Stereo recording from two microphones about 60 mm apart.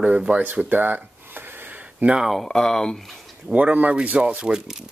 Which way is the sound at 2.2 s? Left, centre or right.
Centre.